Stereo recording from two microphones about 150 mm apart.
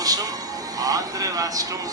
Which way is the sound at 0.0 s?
25° right (ahead or behind).